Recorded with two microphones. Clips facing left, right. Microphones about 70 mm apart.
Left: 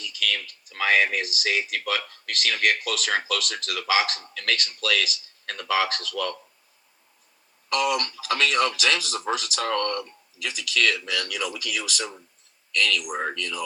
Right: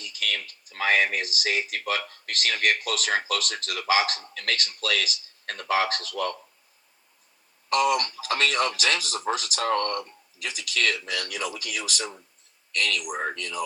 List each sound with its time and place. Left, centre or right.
0.0 s speech: right
7.7 s speech: right